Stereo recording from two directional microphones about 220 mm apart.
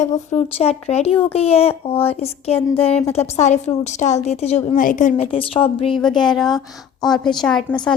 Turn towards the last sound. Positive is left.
turn(degrees=5)  # may be behind; listen again after turning